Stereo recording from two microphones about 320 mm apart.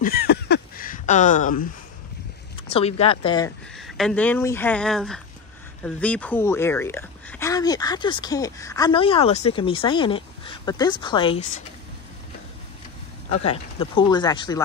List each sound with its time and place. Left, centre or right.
0.0 s a sound: left
2.7 s speech: centre
3.7 s speech: centre
13.3 s speech: centre